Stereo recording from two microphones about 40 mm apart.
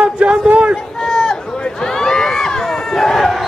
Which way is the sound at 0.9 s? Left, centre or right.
Centre.